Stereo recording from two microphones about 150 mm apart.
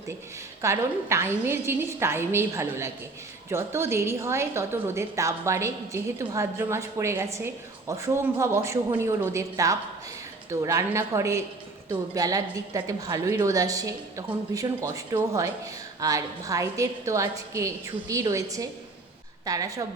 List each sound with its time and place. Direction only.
0.6 s a woman's voice: 20° right (ahead or behind)